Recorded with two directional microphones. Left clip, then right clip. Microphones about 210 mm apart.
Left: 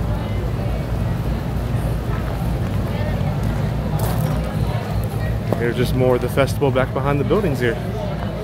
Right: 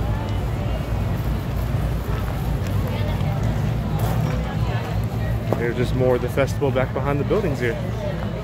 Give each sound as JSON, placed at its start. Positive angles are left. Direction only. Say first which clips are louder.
{"t": 5.6, "sound": "speech", "louder": "left 3 dB", "side_deg": 10}